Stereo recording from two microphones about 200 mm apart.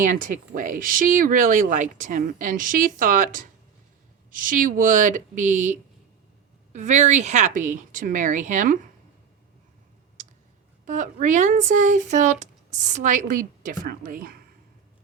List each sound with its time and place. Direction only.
0.0 s speech: 40° right (ahead or behind)
6.7 s speech: 35° right (ahead or behind)
10.8 s speech: 40° right (ahead or behind)